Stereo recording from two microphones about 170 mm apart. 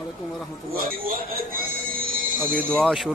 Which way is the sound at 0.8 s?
60° right (ahead or behind).